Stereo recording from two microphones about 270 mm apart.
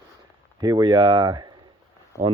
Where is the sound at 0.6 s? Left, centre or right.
Centre.